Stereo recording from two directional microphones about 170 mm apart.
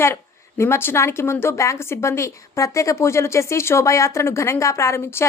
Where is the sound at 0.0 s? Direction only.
15° left (ahead or behind).